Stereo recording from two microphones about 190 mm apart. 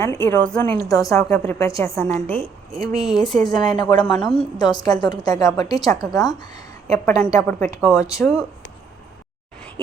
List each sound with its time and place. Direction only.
0.0 s a woman's voice: 15° left (ahead or behind)
0.3 s a woman's voice: 5° left (ahead or behind)
0.6 s a woman's voice: 20° left (ahead or behind)